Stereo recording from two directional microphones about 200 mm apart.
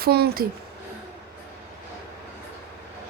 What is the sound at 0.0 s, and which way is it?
Speech, 50° right (ahead or behind).